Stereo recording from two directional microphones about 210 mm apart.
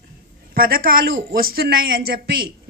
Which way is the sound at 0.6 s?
45° right (ahead or behind).